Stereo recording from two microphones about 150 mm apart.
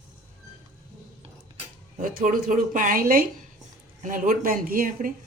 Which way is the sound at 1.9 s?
65° right (ahead or behind).